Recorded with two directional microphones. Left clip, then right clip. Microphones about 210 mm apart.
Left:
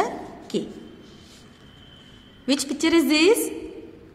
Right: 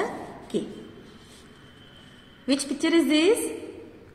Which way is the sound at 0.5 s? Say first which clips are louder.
Left 2 dB; 50° left (ahead or behind).